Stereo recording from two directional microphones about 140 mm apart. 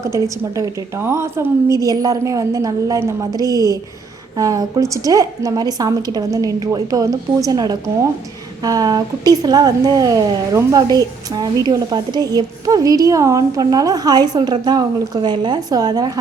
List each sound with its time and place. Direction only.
0.0 s speech: 20° right (ahead or behind)